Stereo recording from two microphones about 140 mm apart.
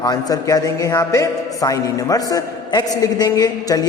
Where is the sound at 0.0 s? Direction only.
30° left (ahead or behind).